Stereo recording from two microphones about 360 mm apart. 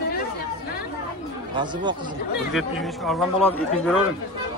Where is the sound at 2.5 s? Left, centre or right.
Centre.